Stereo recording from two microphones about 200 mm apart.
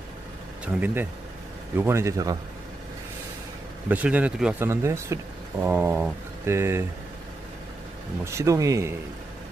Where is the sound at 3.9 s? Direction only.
5° right (ahead or behind).